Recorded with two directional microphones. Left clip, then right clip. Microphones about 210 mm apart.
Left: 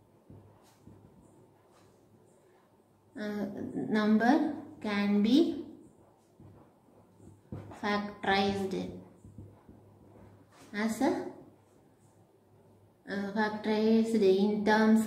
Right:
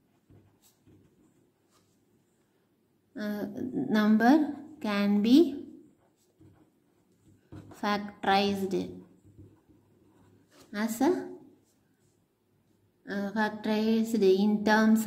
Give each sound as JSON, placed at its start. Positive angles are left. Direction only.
{"t": 3.2, "sound": "a woman's voice", "side_deg": -45}
{"t": 7.8, "sound": "a woman's voice", "side_deg": -50}
{"t": 10.7, "sound": "a woman's voice", "side_deg": -50}
{"t": 13.0, "sound": "a woman's voice", "side_deg": -50}